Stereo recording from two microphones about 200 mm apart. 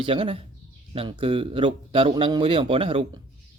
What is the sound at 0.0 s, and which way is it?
Speech, 25° right (ahead or behind).